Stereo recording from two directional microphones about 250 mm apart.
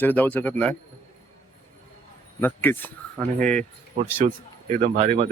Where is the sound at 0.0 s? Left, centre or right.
Centre.